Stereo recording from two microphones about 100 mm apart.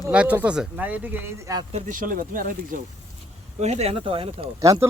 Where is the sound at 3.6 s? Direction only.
90° right; by 4.4 s 65° right (ahead or behind).